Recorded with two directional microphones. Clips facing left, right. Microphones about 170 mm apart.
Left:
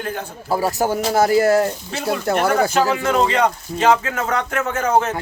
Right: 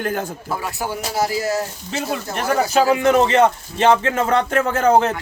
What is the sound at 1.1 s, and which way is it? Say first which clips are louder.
Speech: left 6 dB; 55° left (ahead or behind).